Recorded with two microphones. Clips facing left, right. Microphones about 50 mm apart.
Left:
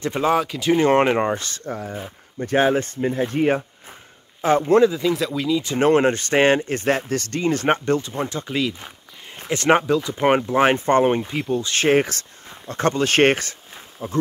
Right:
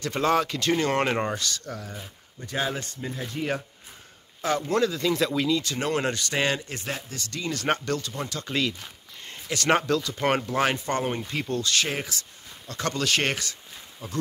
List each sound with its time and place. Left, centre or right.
0.0 s speech: centre
0.7 s speech: left
4.8 s speech: centre
5.2 s speech: centre
5.8 s speech: left
8.5 s speech: centre
9.5 s speech: left
11.2 s speech: centre
11.7 s speech: left
12.6 s speech: left